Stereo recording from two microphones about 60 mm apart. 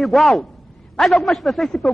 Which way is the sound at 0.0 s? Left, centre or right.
Centre.